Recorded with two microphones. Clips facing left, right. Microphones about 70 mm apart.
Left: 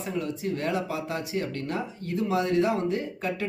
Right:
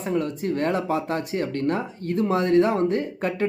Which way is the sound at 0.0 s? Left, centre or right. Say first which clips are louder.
Right 5 dB; right.